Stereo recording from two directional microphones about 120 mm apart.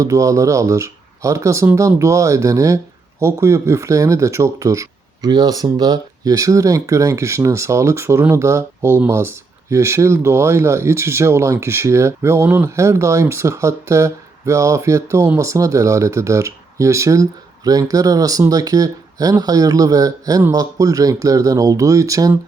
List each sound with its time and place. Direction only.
0.0 s speech: 25° right (ahead or behind)